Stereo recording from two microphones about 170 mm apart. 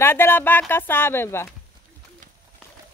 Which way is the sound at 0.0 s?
15° left (ahead or behind).